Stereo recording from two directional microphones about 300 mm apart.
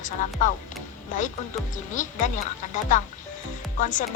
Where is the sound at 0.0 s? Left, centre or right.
Left.